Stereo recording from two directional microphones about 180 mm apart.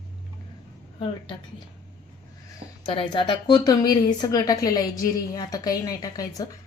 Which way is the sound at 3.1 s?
25° left (ahead or behind).